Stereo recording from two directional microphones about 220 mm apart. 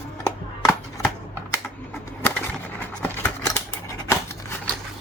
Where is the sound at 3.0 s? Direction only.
10° left (ahead or behind).